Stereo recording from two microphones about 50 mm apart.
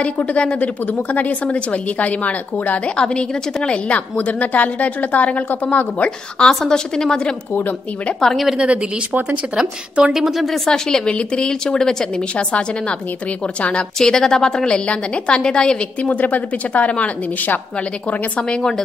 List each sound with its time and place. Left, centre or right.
0.0 s a woman's voice: left
3.0 s a woman's voice: centre
6.5 s speech: centre
9.6 s a woman's voice: right
10.1 s a woman's voice: centre; by 13.8 s left
13.9 s speech: centre
16.0 s a woman's voice: left
18.5 s speech: centre